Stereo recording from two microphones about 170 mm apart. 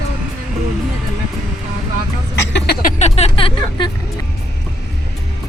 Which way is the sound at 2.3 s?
85° left.